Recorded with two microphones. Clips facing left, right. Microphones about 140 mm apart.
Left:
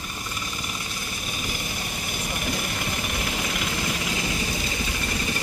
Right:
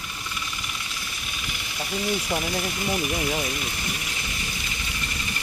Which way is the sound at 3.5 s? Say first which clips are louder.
Left 3 dB; 90° left.